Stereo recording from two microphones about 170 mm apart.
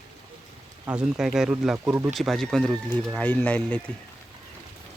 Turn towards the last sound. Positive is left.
turn(degrees=10)  # may be behind; listen again after turning